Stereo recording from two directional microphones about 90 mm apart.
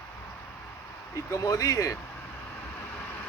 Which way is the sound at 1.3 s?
40° left (ahead or behind).